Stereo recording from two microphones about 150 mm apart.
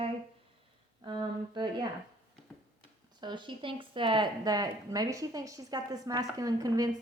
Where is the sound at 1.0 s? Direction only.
30° right (ahead or behind).